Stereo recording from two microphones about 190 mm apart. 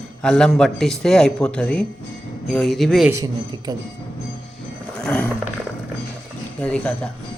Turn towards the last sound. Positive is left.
turn(degrees=5)  # may be behind; listen again after turning